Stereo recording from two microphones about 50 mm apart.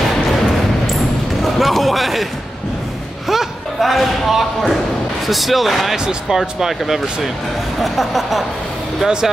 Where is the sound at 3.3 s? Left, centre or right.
Centre.